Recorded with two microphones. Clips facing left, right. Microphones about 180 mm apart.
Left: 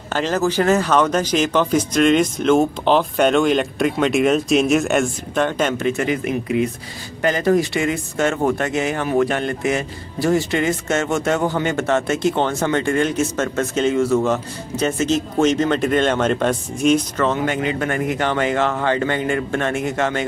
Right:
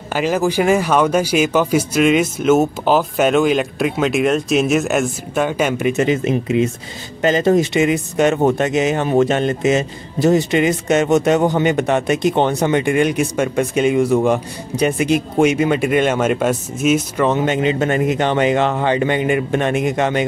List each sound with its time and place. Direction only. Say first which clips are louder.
0.1 s speech: right 2 dB; 10° right (ahead or behind)
17.3 s speech: right 6 dB; 20° right (ahead or behind)